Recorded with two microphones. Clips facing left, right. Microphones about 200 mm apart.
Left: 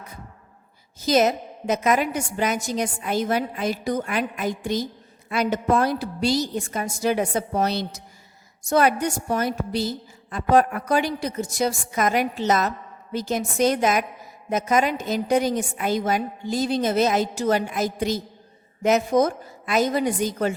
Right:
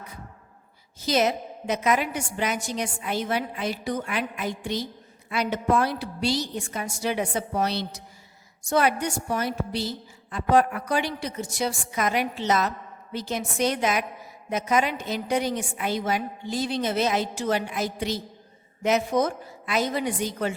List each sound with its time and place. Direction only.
0.9 s a woman's voice: 45° left (ahead or behind)